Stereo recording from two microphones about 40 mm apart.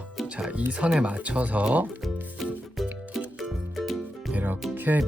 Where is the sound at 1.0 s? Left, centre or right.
Right.